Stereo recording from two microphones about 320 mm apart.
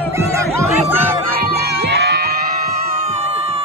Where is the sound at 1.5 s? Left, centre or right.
Right.